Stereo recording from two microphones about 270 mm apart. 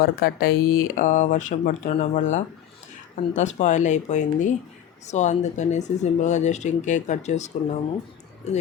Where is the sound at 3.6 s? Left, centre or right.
Left.